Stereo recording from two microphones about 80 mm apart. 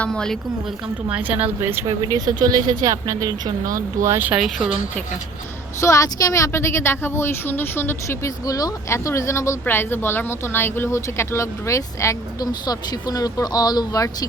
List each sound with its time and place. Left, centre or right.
0.0 s a woman's voice: centre
1.0 s speech: centre
1.9 s speech: right
4.4 s speech: centre
5.8 s a woman's voice: left
8.9 s a woman's voice: left
12.5 s speech: left